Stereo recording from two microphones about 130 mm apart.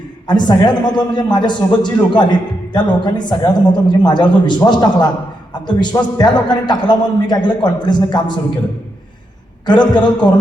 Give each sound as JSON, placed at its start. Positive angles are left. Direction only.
{"t": 0.3, "sound": "a man's voice", "side_deg": 35}
{"t": 9.6, "sound": "a man's voice", "side_deg": 35}